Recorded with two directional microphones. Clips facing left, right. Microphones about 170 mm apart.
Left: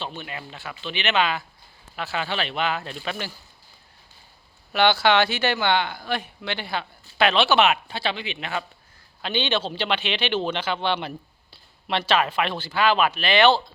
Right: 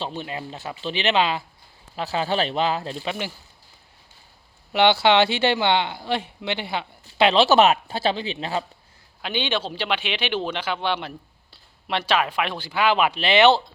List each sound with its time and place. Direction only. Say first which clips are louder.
0.0 s speech: right 4 dB; 35° right (ahead or behind)
4.7 s speech: right 2 dB; 25° right (ahead or behind)
7.4 s speech: right 3 dB; 40° right (ahead or behind)
9.2 s speech: left 1 dB; 10° right (ahead or behind)